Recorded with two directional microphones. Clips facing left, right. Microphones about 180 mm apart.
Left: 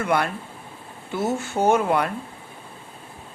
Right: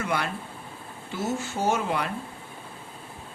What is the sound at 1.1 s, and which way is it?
Speech, 55° left (ahead or behind).